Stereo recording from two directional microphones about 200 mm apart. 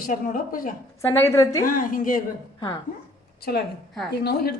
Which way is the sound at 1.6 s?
45° left (ahead or behind).